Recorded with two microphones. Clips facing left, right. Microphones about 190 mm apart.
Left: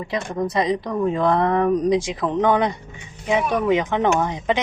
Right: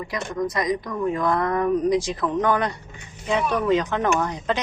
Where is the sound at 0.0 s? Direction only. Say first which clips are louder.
Left 2 dB; 25° left (ahead or behind).